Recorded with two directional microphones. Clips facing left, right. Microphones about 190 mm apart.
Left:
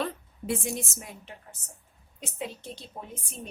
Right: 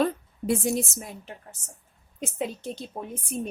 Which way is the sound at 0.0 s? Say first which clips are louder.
Right 7 dB; 40° right (ahead or behind).